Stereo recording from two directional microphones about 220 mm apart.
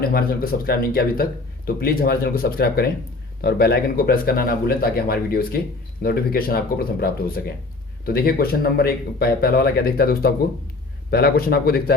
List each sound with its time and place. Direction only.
0.0 s speech: 45° left (ahead or behind)